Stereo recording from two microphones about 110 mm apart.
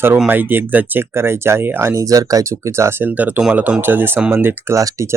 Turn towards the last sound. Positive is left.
turn(degrees=-20)  # may be behind; listen again after turning